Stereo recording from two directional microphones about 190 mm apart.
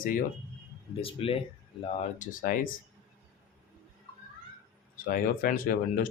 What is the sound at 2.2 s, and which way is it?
Speech, 45° left (ahead or behind).